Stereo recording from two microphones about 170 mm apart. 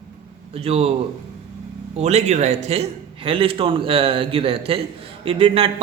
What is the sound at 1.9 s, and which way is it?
A man's voice, 40° right (ahead or behind).